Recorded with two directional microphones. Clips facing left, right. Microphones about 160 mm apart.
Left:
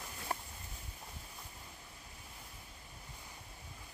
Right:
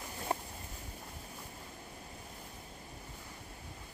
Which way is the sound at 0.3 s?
25° right (ahead or behind).